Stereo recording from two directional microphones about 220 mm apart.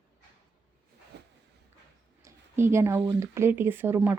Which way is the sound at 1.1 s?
50° right (ahead or behind).